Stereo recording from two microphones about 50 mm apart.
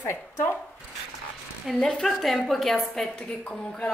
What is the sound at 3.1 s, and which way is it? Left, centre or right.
Speech, left.